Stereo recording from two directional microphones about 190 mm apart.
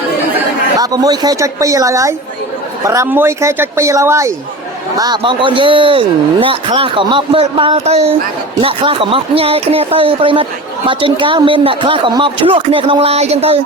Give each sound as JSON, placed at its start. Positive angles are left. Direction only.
{"t": 0.8, "sound": "a man's voice", "side_deg": -20}